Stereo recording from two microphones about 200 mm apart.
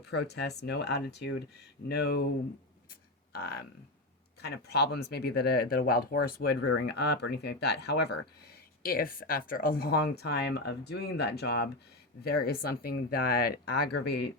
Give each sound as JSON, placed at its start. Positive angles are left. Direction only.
{"t": 0.0, "sound": "speech", "side_deg": 55}
{"t": 2.9, "sound": "a sound", "side_deg": 50}
{"t": 4.4, "sound": "speech", "side_deg": 55}